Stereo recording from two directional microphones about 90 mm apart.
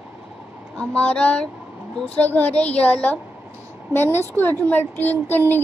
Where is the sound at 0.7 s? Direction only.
15° left (ahead or behind).